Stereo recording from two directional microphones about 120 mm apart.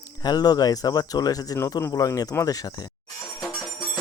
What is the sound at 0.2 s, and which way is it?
Speech, 35° left (ahead or behind).